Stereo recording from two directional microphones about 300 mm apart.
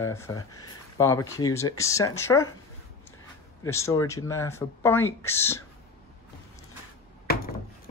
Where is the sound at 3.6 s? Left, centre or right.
Centre.